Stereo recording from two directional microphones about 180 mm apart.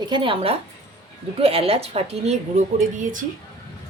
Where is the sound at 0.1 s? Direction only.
30° right (ahead or behind); by 3.2 s 45° right (ahead or behind).